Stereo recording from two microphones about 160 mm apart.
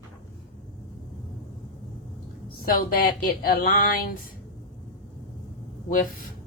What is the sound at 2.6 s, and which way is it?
Speech, 65° left (ahead or behind).